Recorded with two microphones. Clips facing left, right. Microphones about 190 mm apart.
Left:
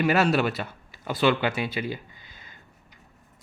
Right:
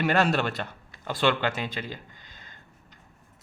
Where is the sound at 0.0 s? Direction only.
5° left (ahead or behind).